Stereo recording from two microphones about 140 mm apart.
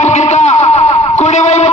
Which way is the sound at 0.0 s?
55° left (ahead or behind).